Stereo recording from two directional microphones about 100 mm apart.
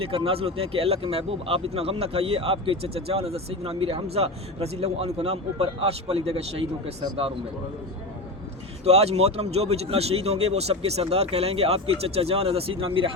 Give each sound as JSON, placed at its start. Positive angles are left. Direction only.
{"t": 0.0, "sound": "speech", "side_deg": -70}
{"t": 8.8, "sound": "speech", "side_deg": -90}